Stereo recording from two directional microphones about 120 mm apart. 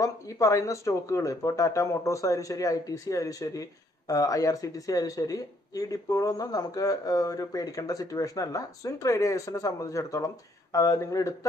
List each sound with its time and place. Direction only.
0.0 s speech: 25° left (ahead or behind)